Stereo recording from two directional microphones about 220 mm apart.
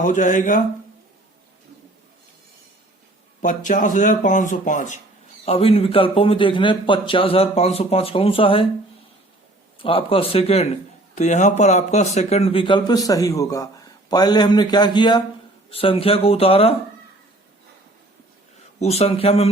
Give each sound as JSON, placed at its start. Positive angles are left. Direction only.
{"t": 0.0, "sound": "speech", "side_deg": 35}
{"t": 3.4, "sound": "a man's voice", "side_deg": 35}
{"t": 9.7, "sound": "a man's voice", "side_deg": 25}
{"t": 18.8, "sound": "a man's voice", "side_deg": 30}